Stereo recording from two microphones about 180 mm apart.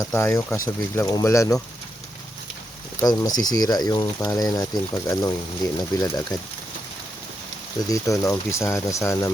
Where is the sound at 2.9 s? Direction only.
20° left (ahead or behind).